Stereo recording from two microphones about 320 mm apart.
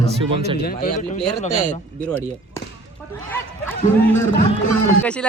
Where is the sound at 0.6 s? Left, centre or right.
Left.